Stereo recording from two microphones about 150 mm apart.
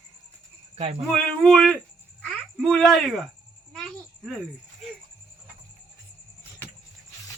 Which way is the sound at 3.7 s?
Centre (ahead or behind).